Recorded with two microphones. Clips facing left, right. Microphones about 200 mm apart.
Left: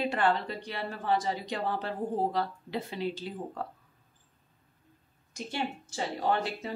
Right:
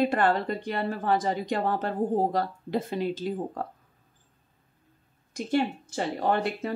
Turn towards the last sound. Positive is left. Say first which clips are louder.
# right 4 dB
turn(degrees=-55)  # may be behind; listen again after turning